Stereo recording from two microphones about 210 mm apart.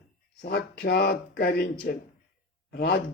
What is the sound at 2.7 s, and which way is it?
Speech, 45° left (ahead or behind).